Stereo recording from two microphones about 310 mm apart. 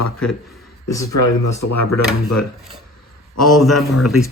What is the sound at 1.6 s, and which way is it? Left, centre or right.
Speech, left.